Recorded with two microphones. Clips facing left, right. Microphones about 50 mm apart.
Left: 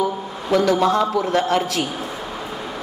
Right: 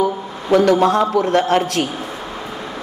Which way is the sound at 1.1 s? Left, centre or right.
Right.